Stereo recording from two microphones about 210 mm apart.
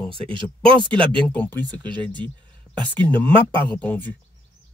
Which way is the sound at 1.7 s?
20° right (ahead or behind).